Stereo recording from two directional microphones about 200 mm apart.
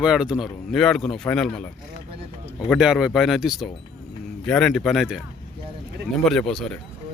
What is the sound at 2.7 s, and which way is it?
Speech, centre (ahead or behind).